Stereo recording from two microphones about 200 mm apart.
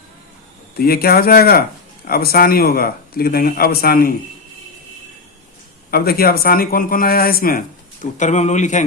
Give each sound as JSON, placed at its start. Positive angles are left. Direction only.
{"t": 0.8, "sound": "speech", "side_deg": 50}
{"t": 5.9, "sound": "speech", "side_deg": 50}
{"t": 8.0, "sound": "a man's voice", "side_deg": 35}